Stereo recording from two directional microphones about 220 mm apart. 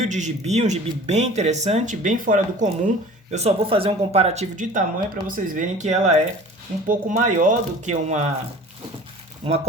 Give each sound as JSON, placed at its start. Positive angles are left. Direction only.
{"t": 0.0, "sound": "speech", "side_deg": -30}
{"t": 3.3, "sound": "speech", "side_deg": -25}
{"t": 9.4, "sound": "speech", "side_deg": -30}